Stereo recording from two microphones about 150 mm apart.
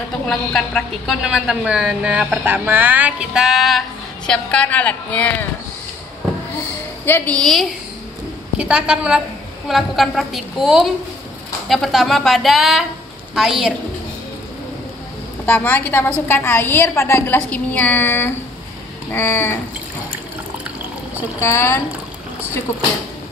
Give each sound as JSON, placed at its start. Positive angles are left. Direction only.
{"t": 0.3, "sound": "a woman's voice", "side_deg": 0}
{"t": 7.1, "sound": "a woman's voice", "side_deg": 10}
{"t": 15.4, "sound": "a woman's voice", "side_deg": 10}
{"t": 21.4, "sound": "a woman's voice", "side_deg": 20}